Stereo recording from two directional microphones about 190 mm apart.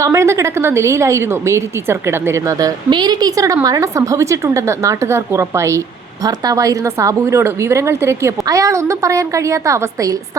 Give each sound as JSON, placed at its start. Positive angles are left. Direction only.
{"t": 0.0, "sound": "a woman's voice", "side_deg": -15}